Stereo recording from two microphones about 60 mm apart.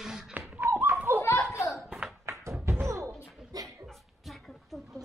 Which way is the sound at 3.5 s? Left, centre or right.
Right.